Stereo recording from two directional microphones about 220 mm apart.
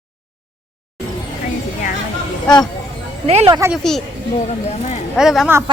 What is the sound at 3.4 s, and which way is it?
Speech, 10° right (ahead or behind).